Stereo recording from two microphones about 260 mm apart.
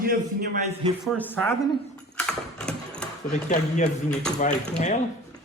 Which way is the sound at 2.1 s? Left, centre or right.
Centre.